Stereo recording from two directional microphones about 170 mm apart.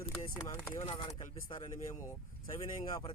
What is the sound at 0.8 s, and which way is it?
Speech, 40° left (ahead or behind).